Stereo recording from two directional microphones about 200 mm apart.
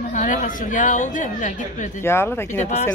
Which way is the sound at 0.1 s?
40° left (ahead or behind).